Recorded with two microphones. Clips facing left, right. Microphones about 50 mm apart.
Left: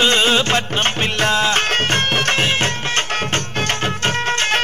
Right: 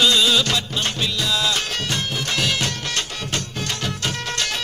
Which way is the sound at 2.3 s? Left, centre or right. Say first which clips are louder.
Left 5 dB; left.